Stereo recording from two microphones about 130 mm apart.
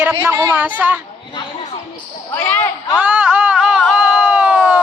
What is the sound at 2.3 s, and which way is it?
Speech, 20° left (ahead or behind).